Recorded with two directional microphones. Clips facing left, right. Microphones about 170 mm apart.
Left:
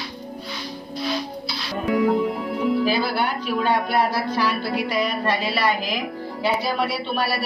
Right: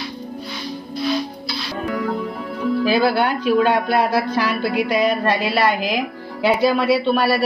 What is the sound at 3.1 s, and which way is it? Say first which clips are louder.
Speech: right 6 dB; 60° right (ahead or behind).